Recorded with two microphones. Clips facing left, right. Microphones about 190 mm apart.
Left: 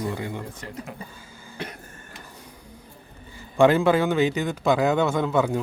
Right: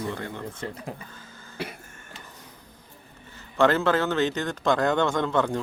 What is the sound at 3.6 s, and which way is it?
Speech, 15° left (ahead or behind).